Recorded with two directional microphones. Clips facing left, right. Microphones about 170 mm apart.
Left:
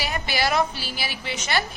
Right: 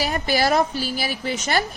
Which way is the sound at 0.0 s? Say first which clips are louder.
Right 5 dB; 40° right (ahead or behind).